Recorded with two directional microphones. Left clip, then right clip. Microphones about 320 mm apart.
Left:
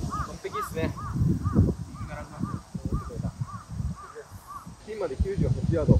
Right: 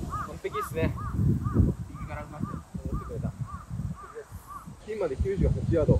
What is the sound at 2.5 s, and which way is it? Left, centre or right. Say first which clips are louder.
Crow: left 2 dB; left.